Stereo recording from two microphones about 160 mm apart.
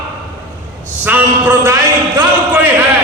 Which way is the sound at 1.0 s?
10° right (ahead or behind).